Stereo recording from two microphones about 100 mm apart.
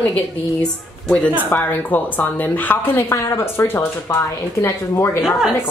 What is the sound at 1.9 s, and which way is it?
Speech, 15° left (ahead or behind).